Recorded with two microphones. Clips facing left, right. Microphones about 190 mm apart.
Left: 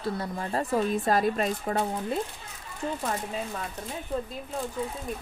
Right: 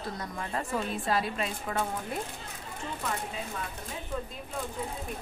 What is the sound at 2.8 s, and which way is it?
Speech, 40° left (ahead or behind).